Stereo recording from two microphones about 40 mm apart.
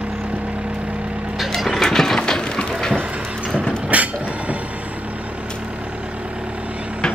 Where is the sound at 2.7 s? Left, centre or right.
Centre.